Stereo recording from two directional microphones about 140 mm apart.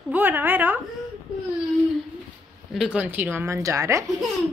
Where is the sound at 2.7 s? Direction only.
5° right (ahead or behind).